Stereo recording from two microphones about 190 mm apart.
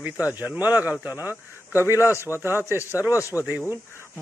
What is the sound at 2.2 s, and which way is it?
Speech, 10° right (ahead or behind).